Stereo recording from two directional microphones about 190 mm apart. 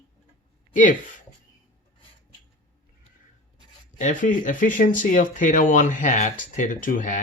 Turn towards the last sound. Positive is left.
turn(degrees=45)  # may be behind; listen again after turning